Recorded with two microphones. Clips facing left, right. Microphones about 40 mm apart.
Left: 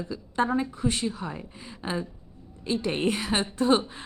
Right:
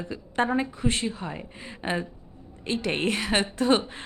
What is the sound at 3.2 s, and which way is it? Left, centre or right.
Speech, right.